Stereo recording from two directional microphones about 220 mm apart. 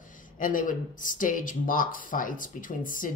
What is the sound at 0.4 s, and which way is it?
Speech, 35° left (ahead or behind).